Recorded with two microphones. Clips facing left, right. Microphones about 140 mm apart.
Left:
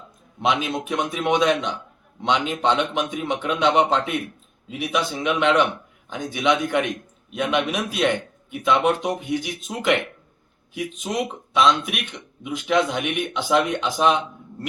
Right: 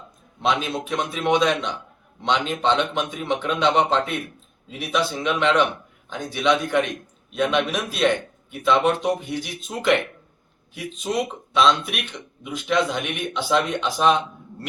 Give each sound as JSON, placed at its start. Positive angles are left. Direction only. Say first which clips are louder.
{"t": 0.4, "sound": "speech", "louder": "left 1 dB", "side_deg": 15}